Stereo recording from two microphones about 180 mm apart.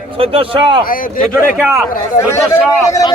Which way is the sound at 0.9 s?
50° left (ahead or behind).